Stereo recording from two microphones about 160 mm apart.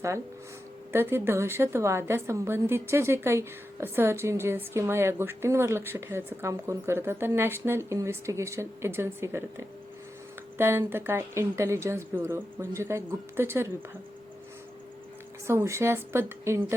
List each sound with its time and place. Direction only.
0.9 s a woman's voice: 15° right (ahead or behind)
10.6 s a woman's voice: 15° right (ahead or behind)
15.4 s a woman's voice: 15° right (ahead or behind)